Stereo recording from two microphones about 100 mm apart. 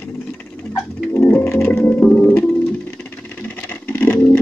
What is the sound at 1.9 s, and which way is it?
Music, 15° left (ahead or behind).